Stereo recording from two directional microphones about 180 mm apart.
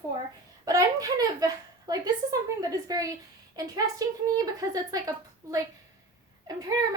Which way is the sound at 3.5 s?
20° right (ahead or behind).